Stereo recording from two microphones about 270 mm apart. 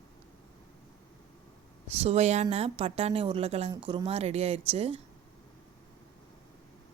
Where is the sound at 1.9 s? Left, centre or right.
Right.